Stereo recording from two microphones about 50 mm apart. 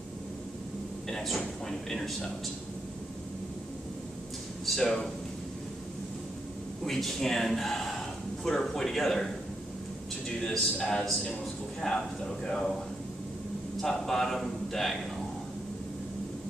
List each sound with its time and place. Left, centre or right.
1.1 s a sound: centre
1.7 s a man's voice: centre
4.6 s a man's voice: centre
6.8 s a man's voice: centre
10.8 s a man's voice: centre
13.7 s a man's voice: centre